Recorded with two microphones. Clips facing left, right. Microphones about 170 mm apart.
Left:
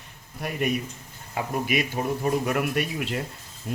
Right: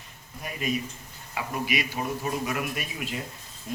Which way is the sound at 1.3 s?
45° left (ahead or behind).